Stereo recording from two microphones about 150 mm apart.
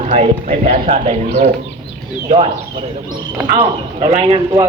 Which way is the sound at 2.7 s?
30° right (ahead or behind).